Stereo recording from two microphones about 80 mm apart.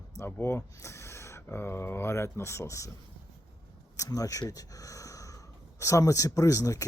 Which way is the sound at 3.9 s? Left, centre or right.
Left.